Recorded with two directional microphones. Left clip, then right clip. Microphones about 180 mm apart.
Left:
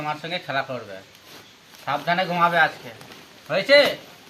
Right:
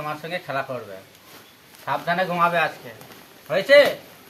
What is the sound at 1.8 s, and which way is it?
Speech, 10° right (ahead or behind).